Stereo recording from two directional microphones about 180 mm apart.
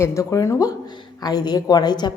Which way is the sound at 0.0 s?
15° left (ahead or behind).